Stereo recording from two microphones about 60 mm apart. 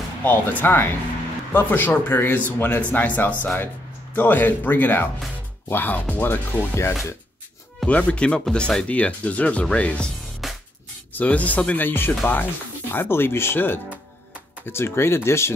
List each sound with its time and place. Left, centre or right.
0.2 s a man's voice: left
6.7 s speech: left
7.8 s speech: left
10.4 s music: centre
11.1 s a man's voice: left